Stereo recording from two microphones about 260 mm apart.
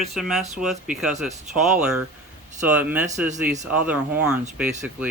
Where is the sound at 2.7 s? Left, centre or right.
Centre.